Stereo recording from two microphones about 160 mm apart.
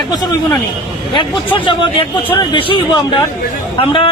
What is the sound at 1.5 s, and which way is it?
A man's voice, 30° left (ahead or behind).